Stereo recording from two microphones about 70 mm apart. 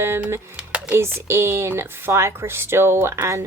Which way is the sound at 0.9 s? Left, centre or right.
Right.